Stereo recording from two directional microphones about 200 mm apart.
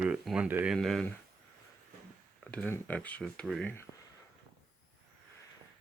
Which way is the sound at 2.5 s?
10° left (ahead or behind).